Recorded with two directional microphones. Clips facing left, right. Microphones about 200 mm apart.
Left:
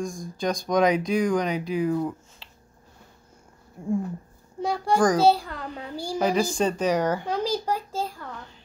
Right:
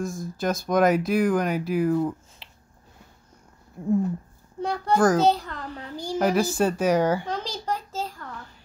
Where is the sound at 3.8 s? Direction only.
Centre (ahead or behind).